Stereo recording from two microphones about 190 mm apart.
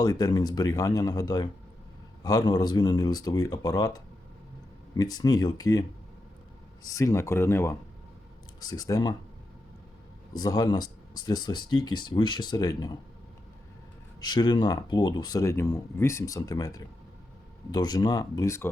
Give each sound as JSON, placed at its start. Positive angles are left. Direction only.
{"t": 0.0, "sound": "speech", "side_deg": 20}
{"t": 6.9, "sound": "speech", "side_deg": 15}
{"t": 10.3, "sound": "speech", "side_deg": 20}
{"t": 14.2, "sound": "speech", "side_deg": 20}